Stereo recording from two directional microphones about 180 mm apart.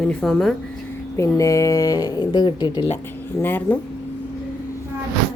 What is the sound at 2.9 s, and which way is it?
Speech, 10° left (ahead or behind).